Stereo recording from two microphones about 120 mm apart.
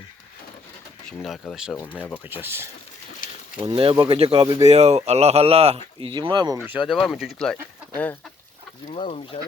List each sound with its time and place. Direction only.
1.0 s speech: 5° left (ahead or behind)
2.3 s speech: 20° right (ahead or behind)
3.6 s speech: 50° right (ahead or behind)
4.6 s speech: 65° right (ahead or behind)
6.1 s speech: 35° right (ahead or behind)
6.6 s speech: 10° right (ahead or behind)
6.8 s speech: centre (ahead or behind)
8.9 s speech: 55° left (ahead or behind)